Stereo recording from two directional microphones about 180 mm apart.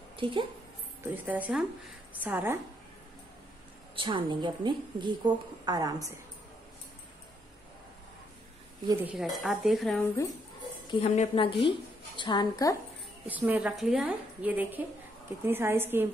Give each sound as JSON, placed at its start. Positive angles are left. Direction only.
{"t": 0.1, "sound": "a woman's voice", "side_deg": -30}
{"t": 1.1, "sound": "a woman's voice", "side_deg": -10}
{"t": 3.9, "sound": "a woman's voice", "side_deg": -25}
{"t": 8.8, "sound": "a woman's voice", "side_deg": -10}
{"t": 9.4, "sound": "speech", "side_deg": 0}
{"t": 10.9, "sound": "a woman's voice", "side_deg": 35}
{"t": 13.3, "sound": "a woman's voice", "side_deg": -10}